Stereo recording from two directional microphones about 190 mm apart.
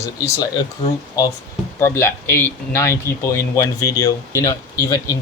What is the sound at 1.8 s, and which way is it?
Speech, 10° left (ahead or behind).